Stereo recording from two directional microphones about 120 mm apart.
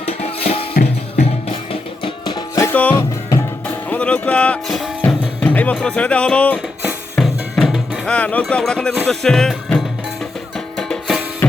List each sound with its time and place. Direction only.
0.0 s music: 60° left (ahead or behind); by 2.6 s 40° left (ahead or behind)
2.6 s music: 15° left (ahead or behind)
2.9 s music: 30° left (ahead or behind)
3.8 s music: 10° left (ahead or behind)
9.0 s speech: 5° left (ahead or behind)
10.8 s music: 5° left (ahead or behind)